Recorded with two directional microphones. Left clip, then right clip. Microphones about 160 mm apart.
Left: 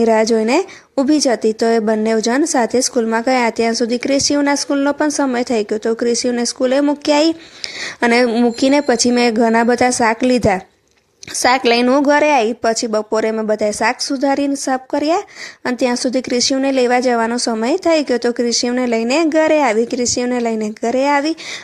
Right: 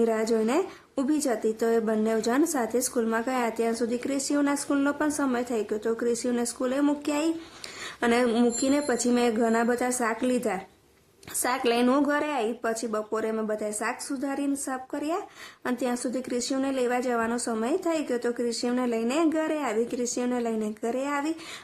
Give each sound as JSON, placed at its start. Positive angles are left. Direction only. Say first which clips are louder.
{"t": 0.0, "sound": "a woman's voice", "louder": "left 12 dB", "side_deg": 40}
{"t": 8.3, "sound": "speech", "louder": "left 9 dB", "side_deg": 20}
{"t": 8.6, "sound": "a woman's voice", "louder": "left 12 dB", "side_deg": 40}